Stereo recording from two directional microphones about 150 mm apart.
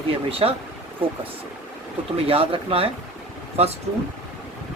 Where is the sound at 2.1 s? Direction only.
40° right (ahead or behind).